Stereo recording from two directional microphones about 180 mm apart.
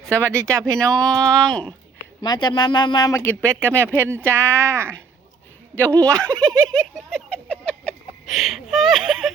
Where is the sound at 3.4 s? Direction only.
15° right (ahead or behind).